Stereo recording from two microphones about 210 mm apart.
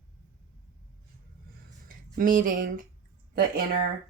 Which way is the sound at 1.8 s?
40° right (ahead or behind).